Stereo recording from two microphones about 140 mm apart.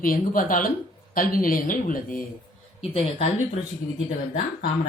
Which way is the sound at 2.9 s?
45° left (ahead or behind).